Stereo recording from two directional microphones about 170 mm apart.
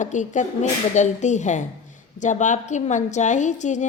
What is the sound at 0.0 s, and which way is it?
A woman's voice, 45° left (ahead or behind).